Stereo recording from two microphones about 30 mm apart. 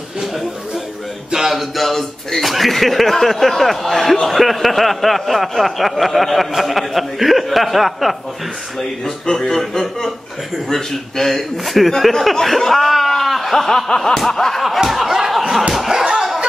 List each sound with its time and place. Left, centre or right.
1.5 s speech: centre
9.0 s speech: centre
14.9 s snicker: centre
15.9 s laughter: centre